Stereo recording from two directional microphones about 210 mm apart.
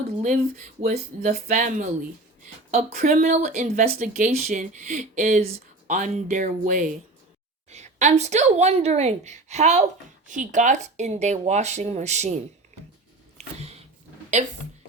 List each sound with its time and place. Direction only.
0.2 s speech: 35° right (ahead or behind)
14.3 s speech: 35° right (ahead or behind)